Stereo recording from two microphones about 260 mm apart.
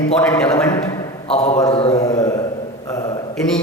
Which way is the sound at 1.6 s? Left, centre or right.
Left.